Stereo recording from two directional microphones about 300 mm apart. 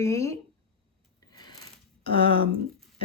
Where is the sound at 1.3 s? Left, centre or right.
Centre.